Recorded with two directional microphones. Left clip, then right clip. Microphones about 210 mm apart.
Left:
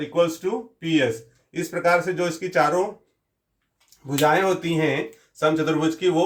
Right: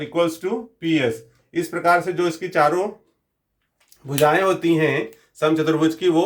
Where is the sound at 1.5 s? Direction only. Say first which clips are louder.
Right 2 dB; 45° right (ahead or behind).